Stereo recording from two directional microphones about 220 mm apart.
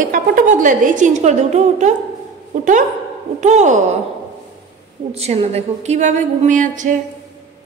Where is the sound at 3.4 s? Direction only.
30° right (ahead or behind).